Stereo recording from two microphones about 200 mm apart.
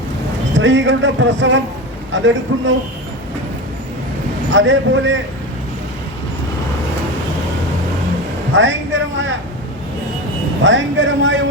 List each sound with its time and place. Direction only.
0.5 s speech: 65° right (ahead or behind)
4.5 s speech: 70° right (ahead or behind)
8.5 s a sound: 70° right (ahead or behind)
10.6 s speech: 70° right (ahead or behind)